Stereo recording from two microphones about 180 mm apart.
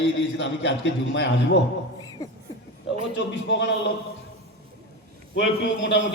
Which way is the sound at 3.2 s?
80° left.